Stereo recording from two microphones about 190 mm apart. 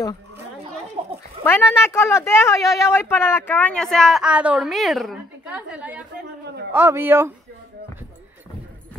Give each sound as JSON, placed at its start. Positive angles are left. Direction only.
{"t": 1.0, "sound": "children playing", "side_deg": -30}
{"t": 1.4, "sound": "speech", "side_deg": 10}
{"t": 6.4, "sound": "a sound", "side_deg": -65}
{"t": 6.7, "sound": "a man's voice", "side_deg": -10}